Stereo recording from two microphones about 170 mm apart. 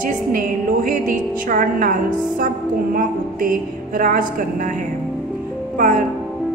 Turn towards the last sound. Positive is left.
turn(degrees=-55)  # may be behind; listen again after turning